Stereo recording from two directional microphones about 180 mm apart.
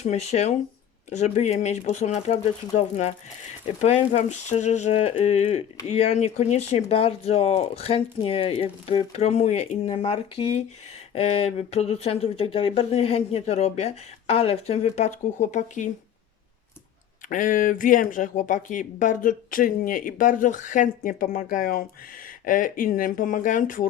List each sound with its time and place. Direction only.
0.0 s speech: 40° left (ahead or behind)
17.2 s speech: 45° left (ahead or behind)